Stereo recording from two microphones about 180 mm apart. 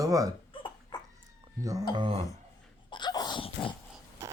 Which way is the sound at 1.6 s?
20° right (ahead or behind).